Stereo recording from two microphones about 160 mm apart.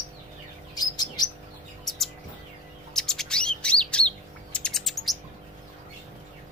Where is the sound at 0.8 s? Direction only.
25° left (ahead or behind).